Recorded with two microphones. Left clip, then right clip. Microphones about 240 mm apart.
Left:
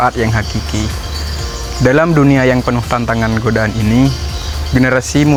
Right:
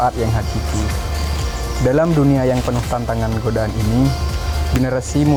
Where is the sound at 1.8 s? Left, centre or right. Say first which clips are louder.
Left 5 dB; left.